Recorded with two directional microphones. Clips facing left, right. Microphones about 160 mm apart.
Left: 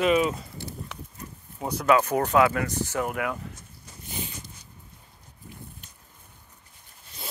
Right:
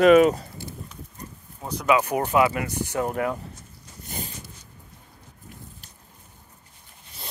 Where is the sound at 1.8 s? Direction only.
10° right (ahead or behind).